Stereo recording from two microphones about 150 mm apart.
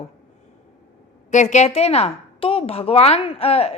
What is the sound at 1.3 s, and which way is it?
A woman's voice, 55° left (ahead or behind).